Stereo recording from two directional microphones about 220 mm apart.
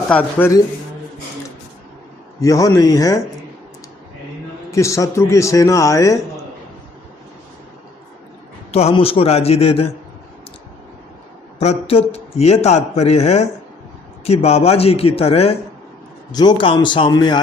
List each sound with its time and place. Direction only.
0.1 s a man's voice: 10° left (ahead or behind)
2.4 s a man's voice: 15° left (ahead or behind)
4.7 s a man's voice: 15° left (ahead or behind)
8.7 s a man's voice: 25° left (ahead or behind)
11.6 s a man's voice: 30° left (ahead or behind)